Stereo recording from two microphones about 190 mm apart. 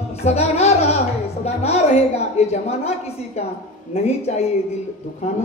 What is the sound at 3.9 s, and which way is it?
Speech, 35° left (ahead or behind).